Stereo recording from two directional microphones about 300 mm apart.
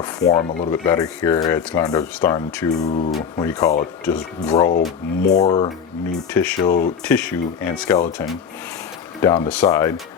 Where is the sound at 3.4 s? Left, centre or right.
Centre.